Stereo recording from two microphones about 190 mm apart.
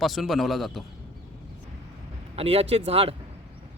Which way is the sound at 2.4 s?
30° right (ahead or behind).